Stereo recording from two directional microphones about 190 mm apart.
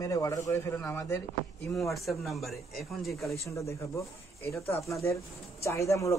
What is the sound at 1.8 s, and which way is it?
Speech, centre (ahead or behind).